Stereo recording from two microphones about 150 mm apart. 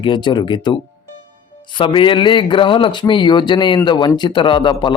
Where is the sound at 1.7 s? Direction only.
35° left (ahead or behind).